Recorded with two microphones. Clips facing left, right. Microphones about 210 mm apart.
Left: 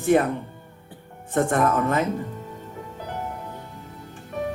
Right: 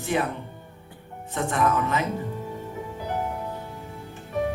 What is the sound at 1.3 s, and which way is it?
Speech, 50° left (ahead or behind).